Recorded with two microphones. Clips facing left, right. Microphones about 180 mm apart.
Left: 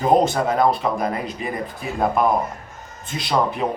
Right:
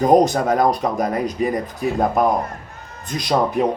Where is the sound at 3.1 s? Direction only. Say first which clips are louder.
Right 3 dB; 40° right (ahead or behind).